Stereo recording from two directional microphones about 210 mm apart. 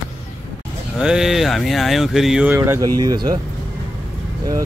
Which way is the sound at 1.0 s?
5° right (ahead or behind).